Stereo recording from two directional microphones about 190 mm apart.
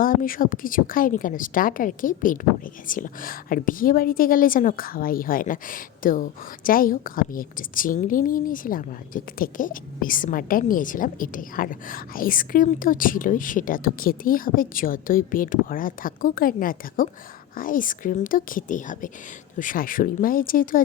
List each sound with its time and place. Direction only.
0.0 s a woman's voice: 50° left (ahead or behind)